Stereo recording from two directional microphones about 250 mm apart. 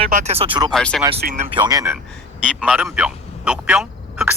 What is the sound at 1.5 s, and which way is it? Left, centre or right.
Speech, centre.